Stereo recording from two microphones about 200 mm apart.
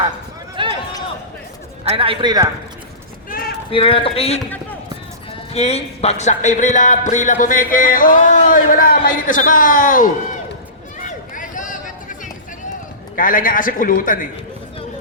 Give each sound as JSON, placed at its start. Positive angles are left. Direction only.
{"t": 0.5, "sound": "run", "side_deg": -25}
{"t": 1.8, "sound": "a man's voice", "side_deg": -30}
{"t": 3.2, "sound": "clip-clop", "side_deg": 45}
{"t": 3.7, "sound": "a man's voice", "side_deg": 25}
{"t": 5.5, "sound": "speech", "side_deg": 30}
{"t": 11.0, "sound": "run", "side_deg": 40}
{"t": 13.1, "sound": "a man's voice", "side_deg": 45}